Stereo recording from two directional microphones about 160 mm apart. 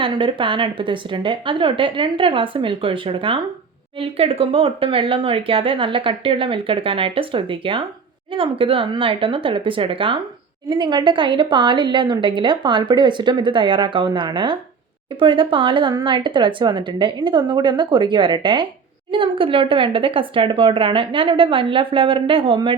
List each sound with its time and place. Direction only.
0.0 s a woman's voice: 30° right (ahead or behind)